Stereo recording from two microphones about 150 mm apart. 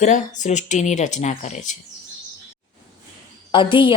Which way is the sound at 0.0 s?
55° left (ahead or behind).